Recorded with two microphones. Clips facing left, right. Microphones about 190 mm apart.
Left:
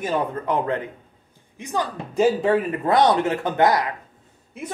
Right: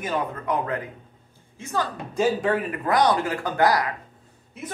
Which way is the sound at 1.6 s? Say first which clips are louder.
Left 1 dB; 15° left (ahead or behind).